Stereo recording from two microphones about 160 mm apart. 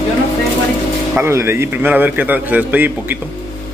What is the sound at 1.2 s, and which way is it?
Speech, 15° right (ahead or behind).